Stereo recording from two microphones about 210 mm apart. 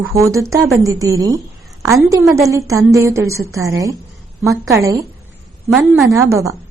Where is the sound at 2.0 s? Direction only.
15° right (ahead or behind).